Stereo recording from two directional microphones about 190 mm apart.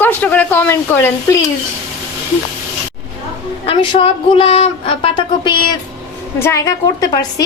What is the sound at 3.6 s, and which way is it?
A woman's voice, 25° left (ahead or behind).